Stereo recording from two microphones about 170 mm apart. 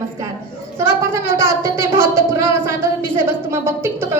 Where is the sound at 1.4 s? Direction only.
15° right (ahead or behind).